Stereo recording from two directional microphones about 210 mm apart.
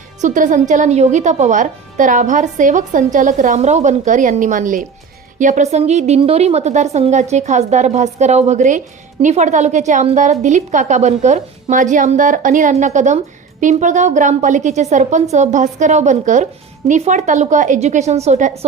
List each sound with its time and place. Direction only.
0.2 s music: 35° right (ahead or behind)
0.7 s a woman's voice: 35° right (ahead or behind)